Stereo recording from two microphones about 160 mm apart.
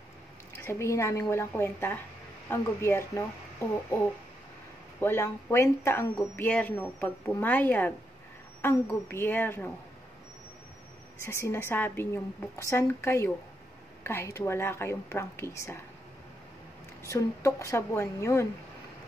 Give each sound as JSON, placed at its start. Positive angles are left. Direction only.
{"t": 0.6, "sound": "speech", "side_deg": 15}
{"t": 5.0, "sound": "speech", "side_deg": 15}
{"t": 11.1, "sound": "speech", "side_deg": 15}
{"t": 17.0, "sound": "speech", "side_deg": 20}